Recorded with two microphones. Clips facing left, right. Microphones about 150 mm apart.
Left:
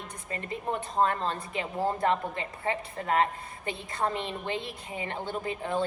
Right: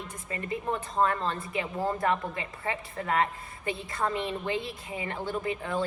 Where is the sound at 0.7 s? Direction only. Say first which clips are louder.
Left 1 dB; 25° left (ahead or behind).